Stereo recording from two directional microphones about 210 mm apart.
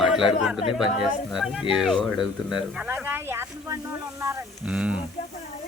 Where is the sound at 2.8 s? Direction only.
10° right (ahead or behind).